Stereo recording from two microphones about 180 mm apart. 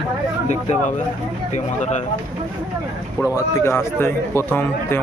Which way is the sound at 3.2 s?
15° left (ahead or behind).